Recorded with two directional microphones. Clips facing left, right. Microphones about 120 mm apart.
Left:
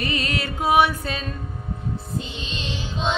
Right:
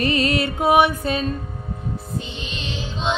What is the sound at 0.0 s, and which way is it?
Music, 30° right (ahead or behind).